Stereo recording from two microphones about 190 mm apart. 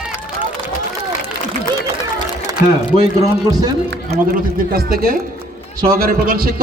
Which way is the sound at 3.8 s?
55° right (ahead or behind).